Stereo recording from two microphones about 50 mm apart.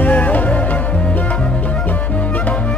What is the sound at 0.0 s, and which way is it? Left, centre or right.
Music, left.